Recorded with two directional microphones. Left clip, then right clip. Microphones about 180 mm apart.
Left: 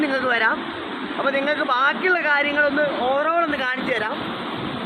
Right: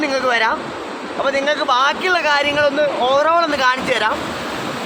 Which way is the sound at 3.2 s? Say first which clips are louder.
Right 6 dB; 70° right (ahead or behind).